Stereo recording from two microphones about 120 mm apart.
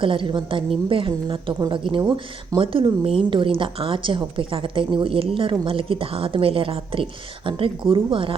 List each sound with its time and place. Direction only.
0.0 s a woman's voice: 45° right (ahead or behind)